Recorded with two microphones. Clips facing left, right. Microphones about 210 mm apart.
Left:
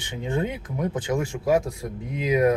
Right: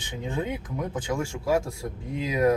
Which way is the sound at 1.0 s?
20° left (ahead or behind).